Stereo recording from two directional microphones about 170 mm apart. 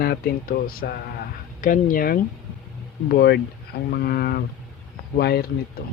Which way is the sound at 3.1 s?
70° left (ahead or behind).